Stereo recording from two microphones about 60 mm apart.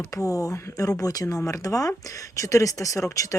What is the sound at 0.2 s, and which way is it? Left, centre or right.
Speech, left.